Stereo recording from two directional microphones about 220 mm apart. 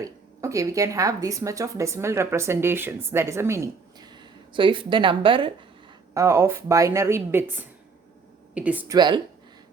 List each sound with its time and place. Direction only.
0.0 s a woman's voice: 15° right (ahead or behind)
9.0 s speech: 20° right (ahead or behind)